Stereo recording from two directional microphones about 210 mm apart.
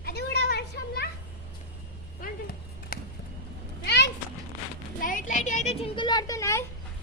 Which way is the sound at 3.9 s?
55° left (ahead or behind).